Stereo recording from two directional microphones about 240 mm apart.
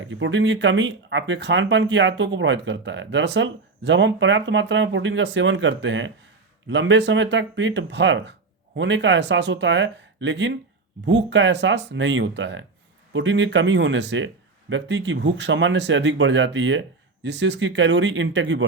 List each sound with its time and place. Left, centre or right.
0.0 s speech: right